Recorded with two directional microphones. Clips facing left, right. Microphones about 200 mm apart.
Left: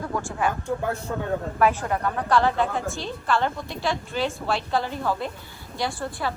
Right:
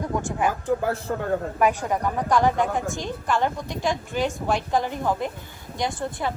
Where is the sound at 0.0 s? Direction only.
20° right (ahead or behind).